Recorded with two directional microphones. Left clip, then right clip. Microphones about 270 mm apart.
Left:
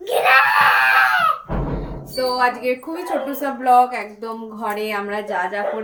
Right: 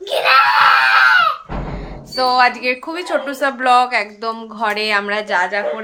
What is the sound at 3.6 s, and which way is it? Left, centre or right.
Speech, right.